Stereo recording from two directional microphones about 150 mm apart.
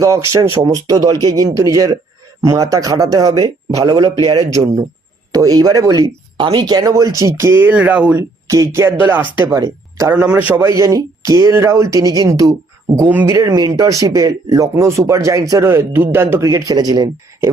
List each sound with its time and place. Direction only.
0.4 s speech: 20° right (ahead or behind)
8.4 s speech: 20° right (ahead or behind)
13.1 s speech: 10° right (ahead or behind)
13.3 s speech: 25° right (ahead or behind)